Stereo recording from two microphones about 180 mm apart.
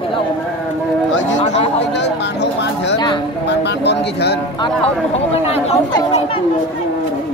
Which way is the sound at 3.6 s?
70° left (ahead or behind).